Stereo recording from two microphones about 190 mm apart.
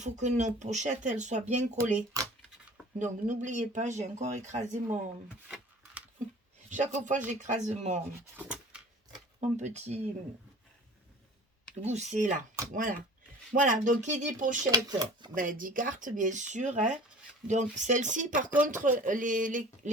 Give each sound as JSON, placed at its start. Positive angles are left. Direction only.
{"t": 0.0, "sound": "speech", "side_deg": -40}
{"t": 2.2, "sound": "a sound", "side_deg": -20}
{"t": 3.0, "sound": "speech", "side_deg": -40}
{"t": 6.7, "sound": "speech", "side_deg": -40}
{"t": 8.4, "sound": "a sound", "side_deg": -5}
{"t": 9.4, "sound": "speech", "side_deg": -40}
{"t": 11.8, "sound": "speech", "side_deg": -35}
{"t": 13.5, "sound": "speech", "side_deg": -45}
{"t": 14.7, "sound": "speech", "side_deg": -20}
{"t": 15.4, "sound": "speech", "side_deg": -45}